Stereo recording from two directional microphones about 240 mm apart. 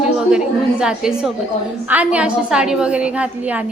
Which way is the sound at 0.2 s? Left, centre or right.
Centre.